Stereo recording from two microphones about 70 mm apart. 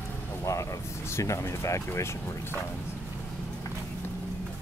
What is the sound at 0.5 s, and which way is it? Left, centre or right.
Speech, left.